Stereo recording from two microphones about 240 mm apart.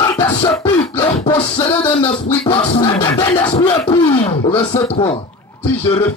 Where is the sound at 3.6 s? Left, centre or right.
Centre; by 5.2 s left.